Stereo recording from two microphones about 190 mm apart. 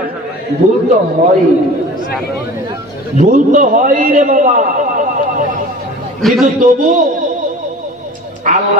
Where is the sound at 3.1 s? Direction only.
40° right (ahead or behind).